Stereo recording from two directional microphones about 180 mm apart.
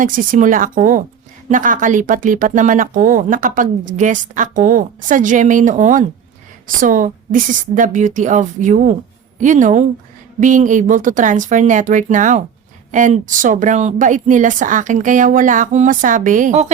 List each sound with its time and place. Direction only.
0.0 s speech: 45° right (ahead or behind)